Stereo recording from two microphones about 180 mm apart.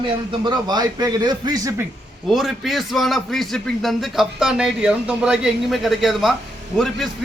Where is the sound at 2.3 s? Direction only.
Centre (ahead or behind).